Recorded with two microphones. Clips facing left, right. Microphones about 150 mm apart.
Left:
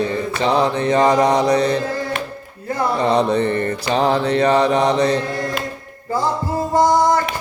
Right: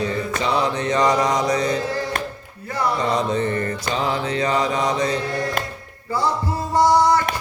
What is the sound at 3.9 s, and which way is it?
Mantra, 65° left (ahead or behind).